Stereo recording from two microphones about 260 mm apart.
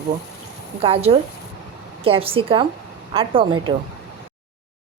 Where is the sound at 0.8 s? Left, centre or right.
Right.